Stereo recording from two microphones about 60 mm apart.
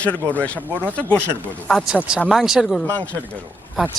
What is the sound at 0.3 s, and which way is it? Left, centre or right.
Speech, left.